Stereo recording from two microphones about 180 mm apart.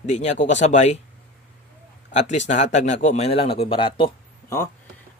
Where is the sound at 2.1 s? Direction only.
40° left (ahead or behind).